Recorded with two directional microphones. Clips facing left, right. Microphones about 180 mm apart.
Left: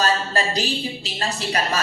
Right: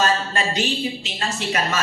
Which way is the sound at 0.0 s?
35° left (ahead or behind).